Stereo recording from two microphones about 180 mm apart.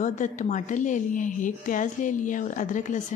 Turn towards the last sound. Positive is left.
turn(degrees=45)  # may be behind; listen again after turning